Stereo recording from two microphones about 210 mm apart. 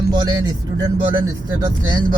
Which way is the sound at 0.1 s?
20° right (ahead or behind).